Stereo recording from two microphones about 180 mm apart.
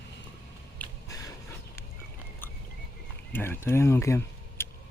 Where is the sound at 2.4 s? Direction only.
10° left (ahead or behind).